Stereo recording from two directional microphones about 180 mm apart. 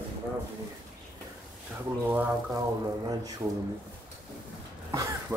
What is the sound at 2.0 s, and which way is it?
A man's voice, 10° right (ahead or behind).